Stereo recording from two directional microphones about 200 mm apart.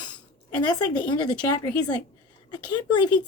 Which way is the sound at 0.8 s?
20° left (ahead or behind).